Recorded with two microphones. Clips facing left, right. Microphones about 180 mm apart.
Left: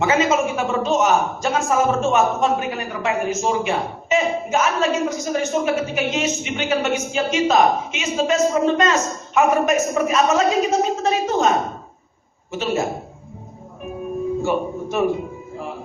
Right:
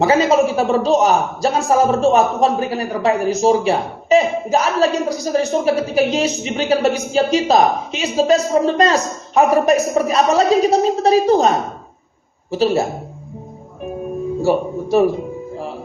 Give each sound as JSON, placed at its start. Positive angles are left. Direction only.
{"t": 0.0, "sound": "a man's voice", "side_deg": -35}
{"t": 14.4, "sound": "a man's voice", "side_deg": -35}